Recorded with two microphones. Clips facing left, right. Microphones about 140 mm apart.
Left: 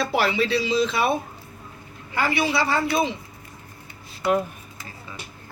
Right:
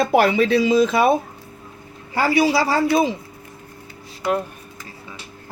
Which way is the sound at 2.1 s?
35° right (ahead or behind).